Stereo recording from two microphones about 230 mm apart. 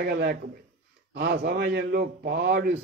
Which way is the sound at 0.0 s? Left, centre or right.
Right.